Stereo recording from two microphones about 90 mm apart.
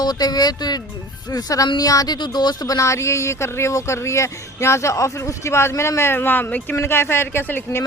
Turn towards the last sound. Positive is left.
turn(degrees=20)  # may be behind; listen again after turning